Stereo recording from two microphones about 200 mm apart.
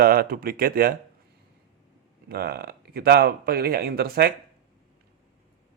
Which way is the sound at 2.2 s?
50° right (ahead or behind).